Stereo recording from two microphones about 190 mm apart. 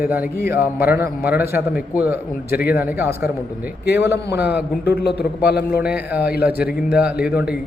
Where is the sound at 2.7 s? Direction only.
10° right (ahead or behind).